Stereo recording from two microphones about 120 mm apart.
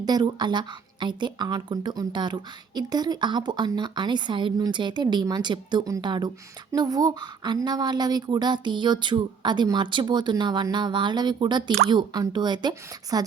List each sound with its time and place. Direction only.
0.0 s a woman's voice: 35° right (ahead or behind)